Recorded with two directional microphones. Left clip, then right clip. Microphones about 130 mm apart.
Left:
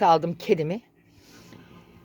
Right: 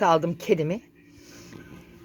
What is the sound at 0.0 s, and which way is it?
Speech, 20° left (ahead or behind).